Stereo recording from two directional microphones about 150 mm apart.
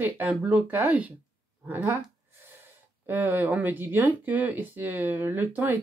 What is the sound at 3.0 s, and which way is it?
Speech, 15° right (ahead or behind).